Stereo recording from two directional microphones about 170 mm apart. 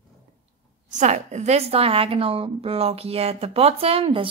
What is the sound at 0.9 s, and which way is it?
A woman's voice, 45° right (ahead or behind).